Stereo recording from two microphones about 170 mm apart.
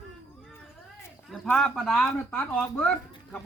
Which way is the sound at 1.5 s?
5° left (ahead or behind).